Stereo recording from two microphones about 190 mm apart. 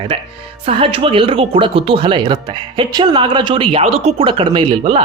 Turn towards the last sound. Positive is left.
turn(degrees=-25)  # may be behind; listen again after turning